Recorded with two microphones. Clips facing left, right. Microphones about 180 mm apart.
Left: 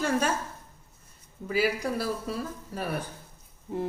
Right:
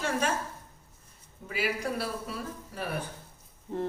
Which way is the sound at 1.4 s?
40° left (ahead or behind).